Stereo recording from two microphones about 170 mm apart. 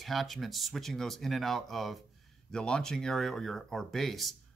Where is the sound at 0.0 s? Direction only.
Centre (ahead or behind).